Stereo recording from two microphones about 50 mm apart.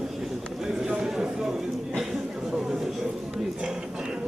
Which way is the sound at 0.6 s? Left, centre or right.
Centre.